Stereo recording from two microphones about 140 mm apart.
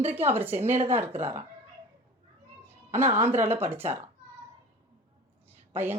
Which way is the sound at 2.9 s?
20° right (ahead or behind).